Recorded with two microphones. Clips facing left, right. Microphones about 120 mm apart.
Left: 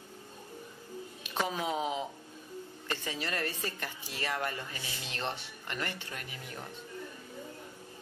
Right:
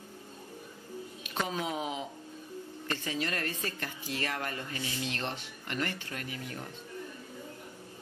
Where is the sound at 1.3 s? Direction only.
15° left (ahead or behind).